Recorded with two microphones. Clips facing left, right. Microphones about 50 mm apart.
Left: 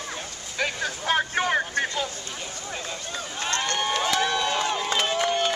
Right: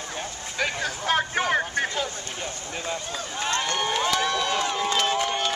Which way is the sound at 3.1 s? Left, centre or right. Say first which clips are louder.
Even; centre.